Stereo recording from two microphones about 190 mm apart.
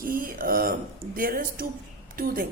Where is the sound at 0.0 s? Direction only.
50° right (ahead or behind).